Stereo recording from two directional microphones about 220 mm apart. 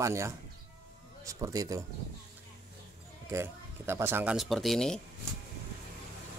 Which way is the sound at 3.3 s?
10° right (ahead or behind).